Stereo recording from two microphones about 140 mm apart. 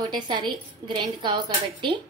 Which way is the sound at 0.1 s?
35° right (ahead or behind).